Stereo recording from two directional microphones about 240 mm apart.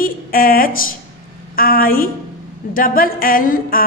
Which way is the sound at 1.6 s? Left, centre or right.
Left.